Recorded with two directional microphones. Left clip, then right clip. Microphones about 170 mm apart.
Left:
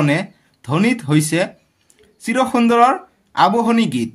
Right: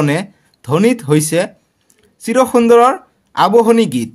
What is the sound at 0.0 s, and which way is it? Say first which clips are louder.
Speech: right 2 dB; 35° right (ahead or behind).